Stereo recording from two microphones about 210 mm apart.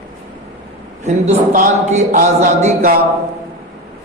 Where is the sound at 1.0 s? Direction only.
35° right (ahead or behind).